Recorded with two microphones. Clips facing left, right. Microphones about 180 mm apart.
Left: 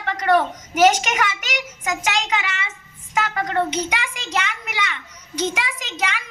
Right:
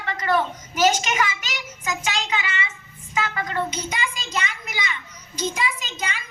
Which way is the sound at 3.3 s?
60° left (ahead or behind).